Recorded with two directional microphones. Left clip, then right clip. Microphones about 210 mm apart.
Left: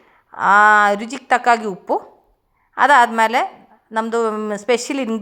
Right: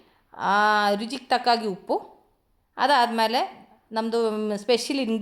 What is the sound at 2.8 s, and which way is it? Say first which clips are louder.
Speech: left 8 dB; centre (ahead or behind).